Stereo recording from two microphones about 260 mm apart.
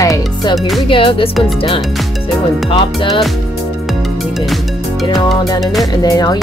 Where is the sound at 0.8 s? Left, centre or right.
Centre.